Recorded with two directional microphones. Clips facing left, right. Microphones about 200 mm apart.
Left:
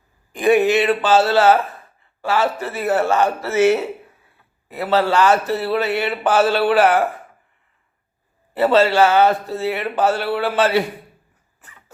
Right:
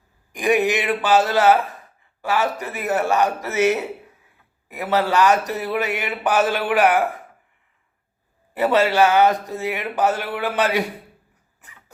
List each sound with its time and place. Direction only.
0.3 s speech: 15° right (ahead or behind)
8.5 s speech: 15° right (ahead or behind)